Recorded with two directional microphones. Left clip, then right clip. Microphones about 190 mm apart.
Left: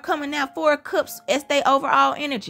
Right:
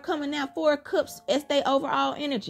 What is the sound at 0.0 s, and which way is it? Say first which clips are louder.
A woman's voice: left 5 dB; 20° left (ahead or behind).